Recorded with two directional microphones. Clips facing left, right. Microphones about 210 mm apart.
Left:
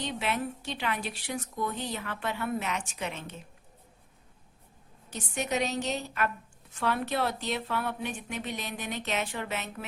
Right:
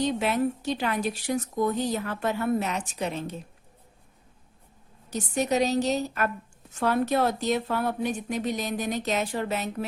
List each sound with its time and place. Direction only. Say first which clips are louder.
0.0 s a woman's voice: right 7 dB; 40° right (ahead or behind)
5.1 s a woman's voice: right 6 dB; 35° right (ahead or behind)